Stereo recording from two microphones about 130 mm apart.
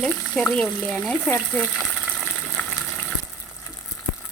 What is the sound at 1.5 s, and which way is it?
Speech, 15° left (ahead or behind).